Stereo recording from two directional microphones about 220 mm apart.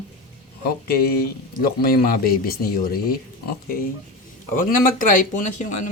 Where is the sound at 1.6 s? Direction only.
45° left (ahead or behind).